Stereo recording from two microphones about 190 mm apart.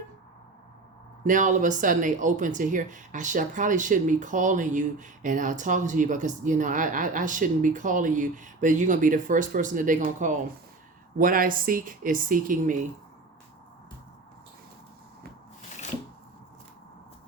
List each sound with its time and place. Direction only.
1.2 s speech: 40° right (ahead or behind)